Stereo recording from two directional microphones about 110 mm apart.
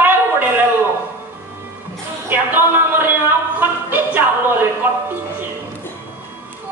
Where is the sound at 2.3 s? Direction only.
20° right (ahead or behind).